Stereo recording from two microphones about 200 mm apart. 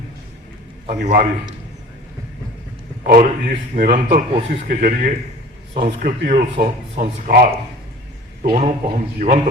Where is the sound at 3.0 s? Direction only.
40° right (ahead or behind).